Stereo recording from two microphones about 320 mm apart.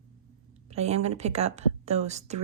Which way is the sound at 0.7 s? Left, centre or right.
Centre.